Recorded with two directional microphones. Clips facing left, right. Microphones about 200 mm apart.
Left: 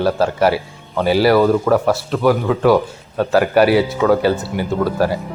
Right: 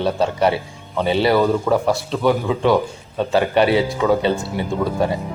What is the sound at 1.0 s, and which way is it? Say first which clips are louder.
Speech: left 4 dB; 25° right (ahead or behind).